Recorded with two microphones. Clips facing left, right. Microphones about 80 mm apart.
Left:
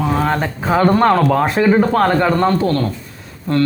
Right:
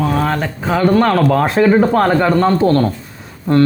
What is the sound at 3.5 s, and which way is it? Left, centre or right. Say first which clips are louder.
Speech: right 4 dB; centre.